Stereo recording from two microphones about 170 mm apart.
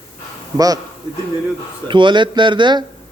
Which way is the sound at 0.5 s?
20° right (ahead or behind).